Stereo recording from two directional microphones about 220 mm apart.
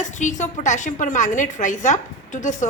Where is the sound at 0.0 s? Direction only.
35° left (ahead or behind).